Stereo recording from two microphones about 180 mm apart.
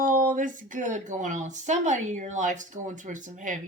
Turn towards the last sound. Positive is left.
turn(degrees=-45)  # may be behind; listen again after turning